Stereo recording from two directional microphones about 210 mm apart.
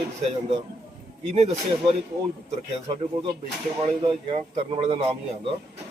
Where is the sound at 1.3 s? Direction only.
30° right (ahead or behind).